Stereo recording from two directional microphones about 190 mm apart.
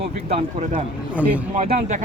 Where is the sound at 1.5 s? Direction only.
35° right (ahead or behind).